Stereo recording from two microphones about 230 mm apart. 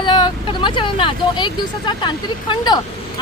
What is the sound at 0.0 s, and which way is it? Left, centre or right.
Vehicle, centre.